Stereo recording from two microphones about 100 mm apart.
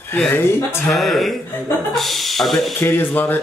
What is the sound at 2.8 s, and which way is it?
Speech, 20° left (ahead or behind).